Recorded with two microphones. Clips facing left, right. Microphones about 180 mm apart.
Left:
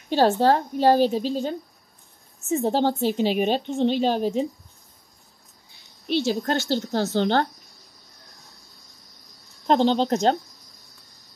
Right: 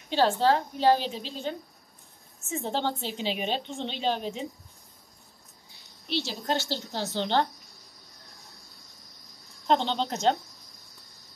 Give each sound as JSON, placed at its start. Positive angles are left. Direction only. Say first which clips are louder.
{"t": 0.1, "sound": "a woman's voice", "louder": "left 5 dB", "side_deg": 45}
{"t": 2.5, "sound": "a woman's voice", "louder": "left 8 dB", "side_deg": 40}
{"t": 6.0, "sound": "a woman's voice", "louder": "left 7 dB", "side_deg": 50}
{"t": 9.7, "sound": "speech", "louder": "left 6 dB", "side_deg": 40}